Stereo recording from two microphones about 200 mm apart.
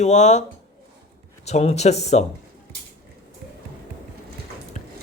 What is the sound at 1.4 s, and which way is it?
Speech, 35° left (ahead or behind).